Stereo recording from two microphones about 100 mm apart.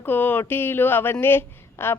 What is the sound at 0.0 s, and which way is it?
A woman's voice, 20° left (ahead or behind).